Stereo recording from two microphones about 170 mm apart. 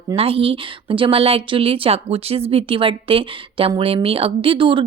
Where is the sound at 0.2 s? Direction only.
35° right (ahead or behind).